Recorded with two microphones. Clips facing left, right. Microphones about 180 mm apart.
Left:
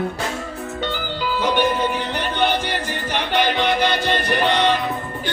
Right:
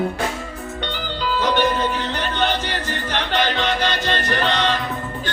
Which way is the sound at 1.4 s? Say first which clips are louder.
Left 1 dB; 10° left (ahead or behind).